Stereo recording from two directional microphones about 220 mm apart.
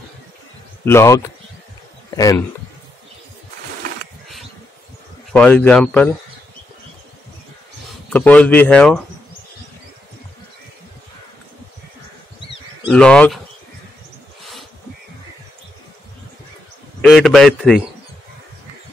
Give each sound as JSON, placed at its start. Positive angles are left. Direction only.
{"t": 0.8, "sound": "speech", "side_deg": 15}
{"t": 5.3, "sound": "speech", "side_deg": 5}
{"t": 8.1, "sound": "speech", "side_deg": 5}
{"t": 12.8, "sound": "speech", "side_deg": 5}
{"t": 17.0, "sound": "speech", "side_deg": 0}